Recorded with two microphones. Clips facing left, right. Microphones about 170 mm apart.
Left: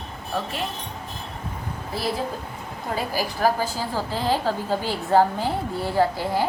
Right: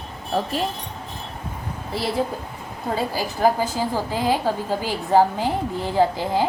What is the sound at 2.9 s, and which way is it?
A woman's voice, 25° right (ahead or behind).